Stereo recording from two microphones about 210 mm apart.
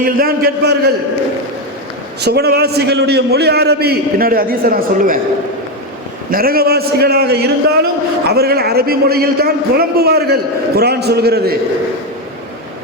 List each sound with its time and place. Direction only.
0.0 s a man's voice: 45° right (ahead or behind)
2.2 s a man's voice: 50° right (ahead or behind)
6.3 s a man's voice: 45° right (ahead or behind)